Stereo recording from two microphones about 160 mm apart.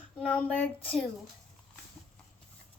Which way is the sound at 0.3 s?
10° left (ahead or behind).